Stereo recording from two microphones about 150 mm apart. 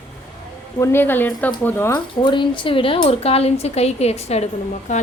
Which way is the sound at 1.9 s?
30° left (ahead or behind).